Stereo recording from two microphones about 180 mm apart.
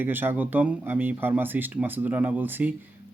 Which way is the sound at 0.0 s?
10° right (ahead or behind).